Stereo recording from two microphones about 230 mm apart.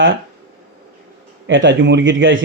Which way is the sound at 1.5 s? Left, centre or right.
Right.